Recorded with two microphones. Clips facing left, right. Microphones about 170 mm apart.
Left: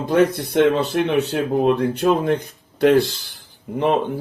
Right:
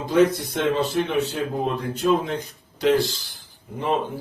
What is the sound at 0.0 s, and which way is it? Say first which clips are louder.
Speech: left 1 dB; 60° left (ahead or behind).